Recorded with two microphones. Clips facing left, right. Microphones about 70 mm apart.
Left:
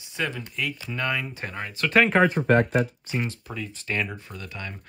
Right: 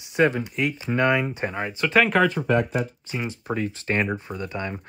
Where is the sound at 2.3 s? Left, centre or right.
Left.